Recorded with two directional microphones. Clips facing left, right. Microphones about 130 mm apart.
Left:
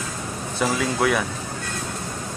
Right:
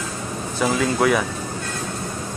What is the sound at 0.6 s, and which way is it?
Speech, centre (ahead or behind).